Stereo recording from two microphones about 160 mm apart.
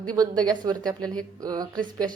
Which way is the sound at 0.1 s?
25° right (ahead or behind).